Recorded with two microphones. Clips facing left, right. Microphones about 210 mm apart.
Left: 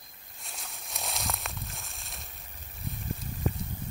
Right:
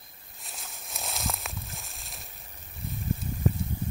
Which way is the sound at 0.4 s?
Centre (ahead or behind).